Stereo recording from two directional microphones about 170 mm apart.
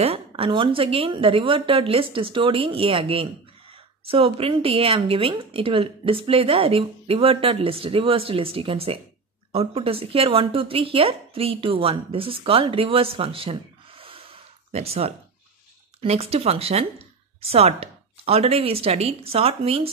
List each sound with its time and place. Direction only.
0.0 s speech: 35° right (ahead or behind)